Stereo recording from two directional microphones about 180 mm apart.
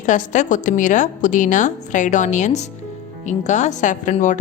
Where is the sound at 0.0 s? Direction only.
45° left (ahead or behind).